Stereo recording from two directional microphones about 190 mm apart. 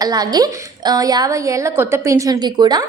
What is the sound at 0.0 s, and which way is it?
A woman's voice, 20° right (ahead or behind).